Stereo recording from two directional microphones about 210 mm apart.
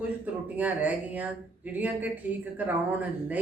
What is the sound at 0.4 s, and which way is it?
Speech, 10° right (ahead or behind).